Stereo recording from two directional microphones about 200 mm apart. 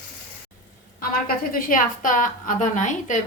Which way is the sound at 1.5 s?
40° left (ahead or behind).